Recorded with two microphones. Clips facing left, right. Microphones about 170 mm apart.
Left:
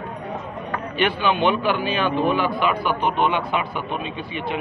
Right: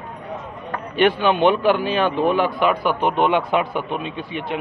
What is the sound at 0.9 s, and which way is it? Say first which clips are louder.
Speech: right 5 dB; 55° right (ahead or behind).